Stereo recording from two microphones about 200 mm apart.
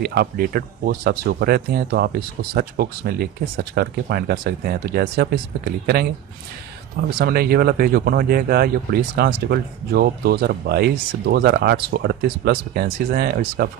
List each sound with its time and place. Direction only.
0.0 s speech: 50° right (ahead or behind)